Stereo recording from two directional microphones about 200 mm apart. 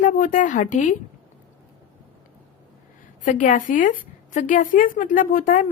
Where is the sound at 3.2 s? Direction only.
40° left (ahead or behind).